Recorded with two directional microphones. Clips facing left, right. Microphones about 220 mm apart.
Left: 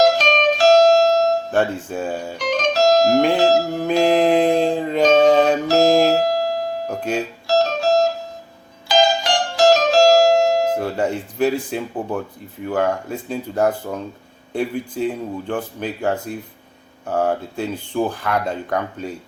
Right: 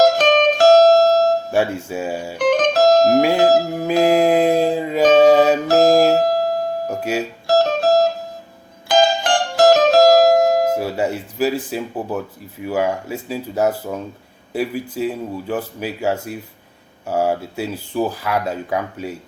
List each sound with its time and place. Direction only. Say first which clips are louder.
0.0 s music: right 2 dB; 55° right (ahead or behind)
1.5 s speech: right 1 dB; 10° right (ahead or behind)
2.4 s music: right 4 dB; 55° right (ahead or behind)
3.2 s speech: right 1 dB; 5° right (ahead or behind)
3.7 s music: right 1 dB; 5° right (ahead or behind)
6.1 s music: right 2 dB; 55° right (ahead or behind)
6.8 s speech: right 1 dB; 10° right (ahead or behind)
7.4 s music: right 3 dB; 55° right (ahead or behind)
8.9 s music: right 1 dB; 55° right (ahead or behind)
10.8 s speech: even; 5° right (ahead or behind)